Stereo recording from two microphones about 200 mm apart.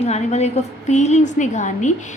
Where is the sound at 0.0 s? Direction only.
35° left (ahead or behind).